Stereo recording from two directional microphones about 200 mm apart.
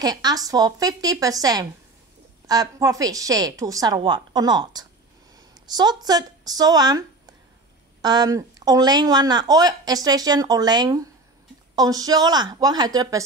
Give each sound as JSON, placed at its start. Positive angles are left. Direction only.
{"t": 0.0, "sound": "speech", "side_deg": -20}